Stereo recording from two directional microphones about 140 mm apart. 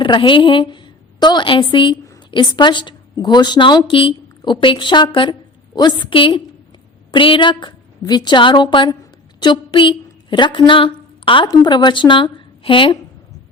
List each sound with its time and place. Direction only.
0.0 s a woman's voice: 35° left (ahead or behind)